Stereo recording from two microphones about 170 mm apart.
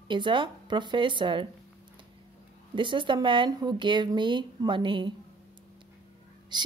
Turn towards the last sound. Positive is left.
turn(degrees=-25)  # may be behind; listen again after turning